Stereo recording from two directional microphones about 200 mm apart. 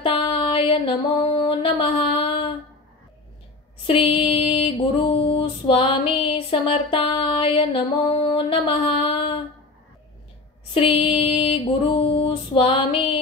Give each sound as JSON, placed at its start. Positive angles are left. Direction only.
{"t": 0.0, "sound": "music", "side_deg": 25}
{"t": 1.5, "sound": "a sound", "side_deg": 25}
{"t": 3.8, "sound": "music", "side_deg": 25}
{"t": 10.7, "sound": "music", "side_deg": 25}